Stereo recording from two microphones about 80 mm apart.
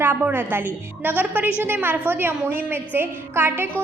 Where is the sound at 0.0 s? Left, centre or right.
Right.